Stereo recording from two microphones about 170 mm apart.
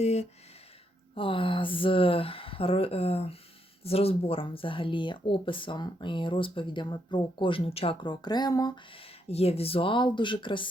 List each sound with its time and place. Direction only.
0.0 s speech: 40° left (ahead or behind)